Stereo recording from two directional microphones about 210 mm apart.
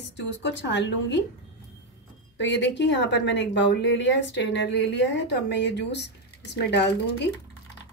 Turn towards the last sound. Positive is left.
turn(degrees=55)  # may be behind; listen again after turning